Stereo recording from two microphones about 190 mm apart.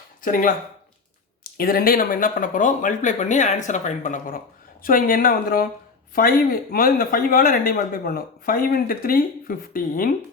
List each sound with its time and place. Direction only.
0.2 s speech: 45° left (ahead or behind)
1.5 s speech: 50° left (ahead or behind)